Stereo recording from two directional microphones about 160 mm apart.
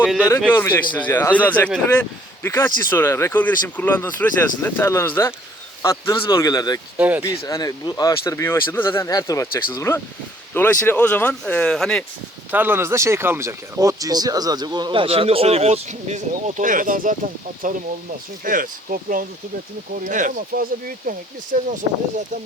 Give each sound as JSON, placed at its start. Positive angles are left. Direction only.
{"t": 0.3, "sound": "speech", "side_deg": 15}
{"t": 6.9, "sound": "speech", "side_deg": -10}
{"t": 7.3, "sound": "speech", "side_deg": 20}
{"t": 12.5, "sound": "speech", "side_deg": -10}